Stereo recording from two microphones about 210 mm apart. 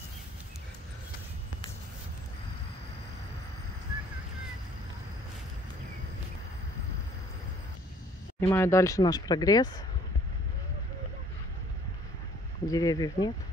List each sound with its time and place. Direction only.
8.4 s speech: 15° left (ahead or behind)
12.6 s speech: 15° left (ahead or behind)